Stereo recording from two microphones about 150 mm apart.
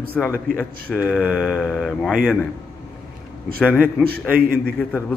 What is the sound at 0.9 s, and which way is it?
Speech, 10° right (ahead or behind).